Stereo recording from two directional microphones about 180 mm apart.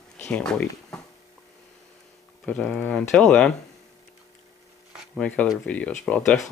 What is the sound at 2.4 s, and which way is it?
Speech, 5° left (ahead or behind).